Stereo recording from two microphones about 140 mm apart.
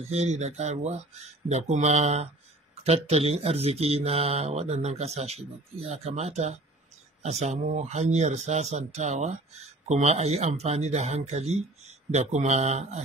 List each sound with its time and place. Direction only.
0.1 s speech: 50° right (ahead or behind)